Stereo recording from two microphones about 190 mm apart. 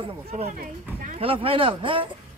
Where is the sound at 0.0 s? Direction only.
30° right (ahead or behind).